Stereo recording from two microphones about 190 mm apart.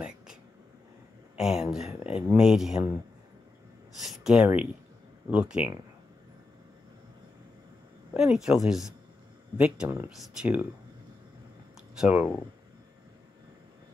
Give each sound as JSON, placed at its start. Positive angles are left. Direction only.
{"t": 1.3, "sound": "speech", "side_deg": 0}
{"t": 1.9, "sound": "speech", "side_deg": 30}
{"t": 2.3, "sound": "speech", "side_deg": 0}
{"t": 4.0, "sound": "speech", "side_deg": 0}
{"t": 8.1, "sound": "speech", "side_deg": -5}
{"t": 12.0, "sound": "speech", "side_deg": -5}